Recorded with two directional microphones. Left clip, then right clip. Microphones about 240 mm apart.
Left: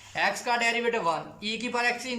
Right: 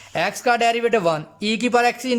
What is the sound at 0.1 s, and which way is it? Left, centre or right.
A man's voice, right.